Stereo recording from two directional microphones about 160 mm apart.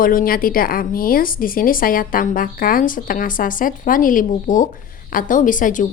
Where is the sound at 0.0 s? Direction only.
60° left (ahead or behind).